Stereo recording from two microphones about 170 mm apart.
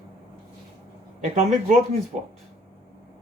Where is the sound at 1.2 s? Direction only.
40° right (ahead or behind).